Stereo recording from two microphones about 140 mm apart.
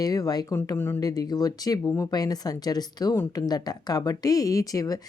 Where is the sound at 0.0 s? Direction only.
25° left (ahead or behind).